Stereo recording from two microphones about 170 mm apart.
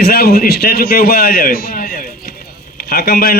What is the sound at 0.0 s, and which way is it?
A man's voice, 65° left (ahead or behind).